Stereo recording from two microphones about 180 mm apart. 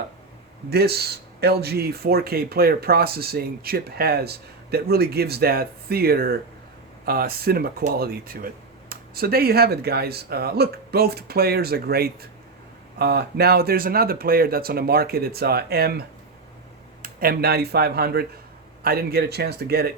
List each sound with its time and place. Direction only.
0.7 s speech: 60° right (ahead or behind)